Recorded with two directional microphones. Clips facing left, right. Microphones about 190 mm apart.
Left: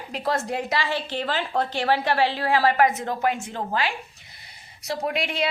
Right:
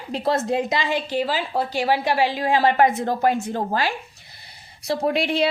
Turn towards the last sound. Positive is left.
turn(degrees=-30)  # may be behind; listen again after turning